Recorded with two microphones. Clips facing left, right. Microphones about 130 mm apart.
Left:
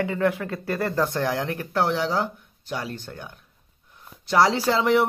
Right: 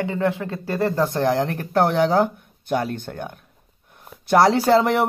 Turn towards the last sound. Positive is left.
turn(degrees=-50)  # may be behind; listen again after turning